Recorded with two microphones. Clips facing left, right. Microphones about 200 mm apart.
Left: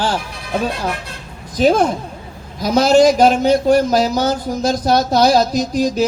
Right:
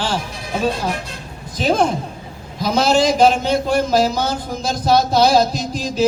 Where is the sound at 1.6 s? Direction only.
50° left (ahead or behind).